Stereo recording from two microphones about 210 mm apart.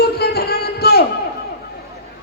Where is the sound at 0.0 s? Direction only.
50° left (ahead or behind).